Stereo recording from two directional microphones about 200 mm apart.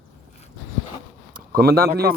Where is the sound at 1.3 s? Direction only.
50° right (ahead or behind).